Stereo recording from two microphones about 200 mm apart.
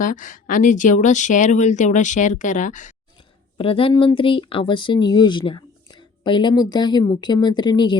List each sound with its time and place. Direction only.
0.0 s speech: 40° left (ahead or behind)
3.6 s speech: 25° left (ahead or behind)